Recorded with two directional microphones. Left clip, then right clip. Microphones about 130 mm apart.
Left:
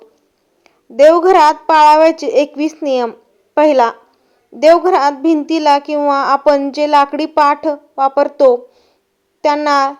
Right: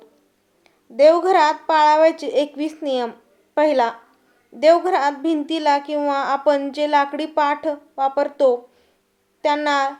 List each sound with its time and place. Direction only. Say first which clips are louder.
0.6 s a woman's voice: left 5 dB; 30° left (ahead or behind)